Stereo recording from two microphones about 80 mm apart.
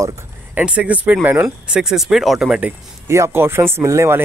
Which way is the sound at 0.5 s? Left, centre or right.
Centre.